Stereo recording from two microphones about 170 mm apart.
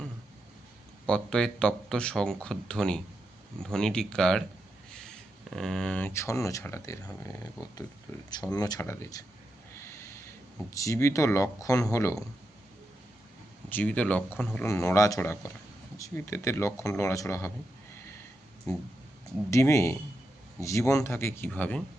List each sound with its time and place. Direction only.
1.0 s speech: 5° left (ahead or behind)
13.7 s speech: 10° left (ahead or behind)
19.5 s speech: 20° left (ahead or behind)